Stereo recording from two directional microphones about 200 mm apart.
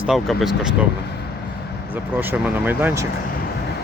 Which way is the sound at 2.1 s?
10° right (ahead or behind).